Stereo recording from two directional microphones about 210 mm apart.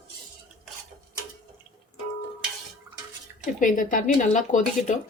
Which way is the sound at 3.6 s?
40° left (ahead or behind).